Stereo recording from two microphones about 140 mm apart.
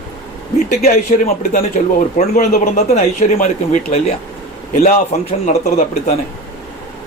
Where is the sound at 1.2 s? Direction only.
70° left (ahead or behind); by 4.1 s 45° left (ahead or behind).